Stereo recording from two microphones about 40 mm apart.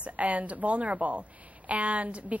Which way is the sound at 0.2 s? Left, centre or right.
Right.